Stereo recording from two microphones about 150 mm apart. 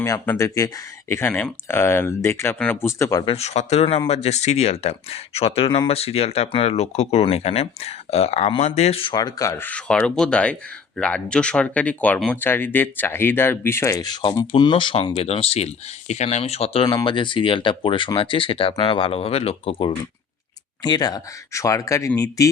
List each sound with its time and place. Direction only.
0.0 s speech: 20° left (ahead or behind)
3.2 s speech: 45° left (ahead or behind)
16.9 s speech: 30° left (ahead or behind)
20.8 s speech: 25° left (ahead or behind)